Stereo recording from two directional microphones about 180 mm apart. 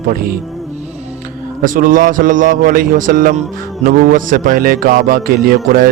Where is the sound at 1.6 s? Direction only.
50° right (ahead or behind).